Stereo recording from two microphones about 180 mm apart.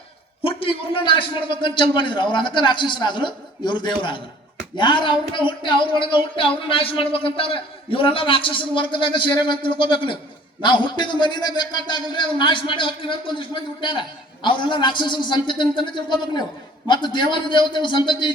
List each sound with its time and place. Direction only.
0.4 s a man's voice: 30° left (ahead or behind)